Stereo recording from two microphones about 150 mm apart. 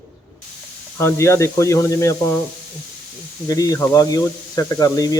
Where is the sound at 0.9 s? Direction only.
20° left (ahead or behind).